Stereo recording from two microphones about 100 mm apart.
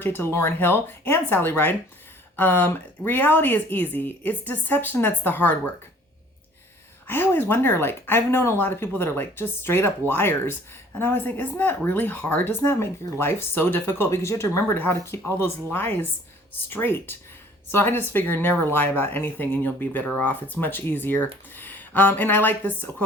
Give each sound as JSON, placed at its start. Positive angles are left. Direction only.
{"t": 0.0, "sound": "speech", "side_deg": 25}
{"t": 7.1, "sound": "speech", "side_deg": 20}